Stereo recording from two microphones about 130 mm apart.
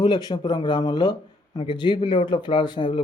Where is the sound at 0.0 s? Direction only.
35° left (ahead or behind).